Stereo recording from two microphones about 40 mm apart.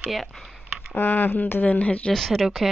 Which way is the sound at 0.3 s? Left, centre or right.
Centre.